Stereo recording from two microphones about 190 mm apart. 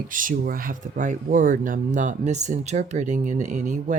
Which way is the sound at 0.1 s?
45° right (ahead or behind).